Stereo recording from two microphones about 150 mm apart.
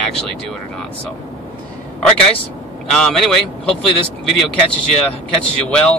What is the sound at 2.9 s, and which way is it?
Speech, 5° left (ahead or behind).